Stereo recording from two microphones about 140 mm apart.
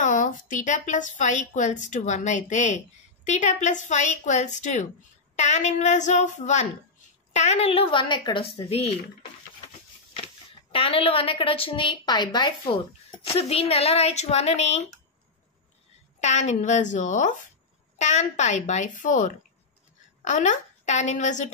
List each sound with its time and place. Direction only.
0.0 s a woman's voice: 65° left (ahead or behind)
7.3 s speech: 45° left (ahead or behind)
10.1 s speech: 45° left (ahead or behind)
16.2 s a woman's voice: 55° left (ahead or behind)